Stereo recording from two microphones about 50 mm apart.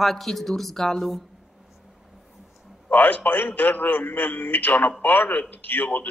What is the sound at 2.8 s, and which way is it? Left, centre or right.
A man's voice, left.